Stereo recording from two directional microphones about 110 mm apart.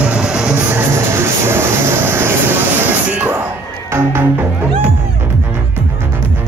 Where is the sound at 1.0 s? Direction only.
25° right (ahead or behind).